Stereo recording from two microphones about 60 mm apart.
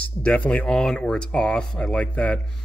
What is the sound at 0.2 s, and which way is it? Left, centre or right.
Speech, centre.